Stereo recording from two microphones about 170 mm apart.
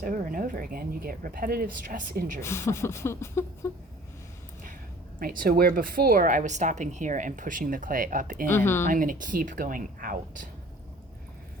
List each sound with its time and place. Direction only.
0.0 s speech: 55° right (ahead or behind)
2.4 s speech: 15° left (ahead or behind)
5.2 s a woman's voice: 55° right (ahead or behind)
8.4 s speech: 15° left (ahead or behind)
8.9 s a woman's voice: 55° right (ahead or behind)